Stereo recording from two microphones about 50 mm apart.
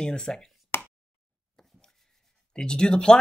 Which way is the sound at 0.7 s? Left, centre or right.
Left.